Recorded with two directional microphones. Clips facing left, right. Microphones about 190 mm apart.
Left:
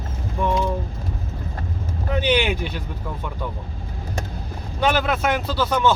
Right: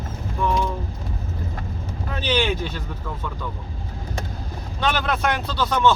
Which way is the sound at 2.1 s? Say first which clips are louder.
Left 3 dB; 15° left (ahead or behind).